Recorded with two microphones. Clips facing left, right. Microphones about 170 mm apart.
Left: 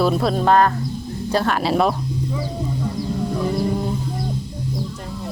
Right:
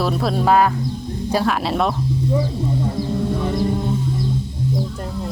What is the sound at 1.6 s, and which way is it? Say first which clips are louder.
Speech: left 2 dB; centre (ahead or behind).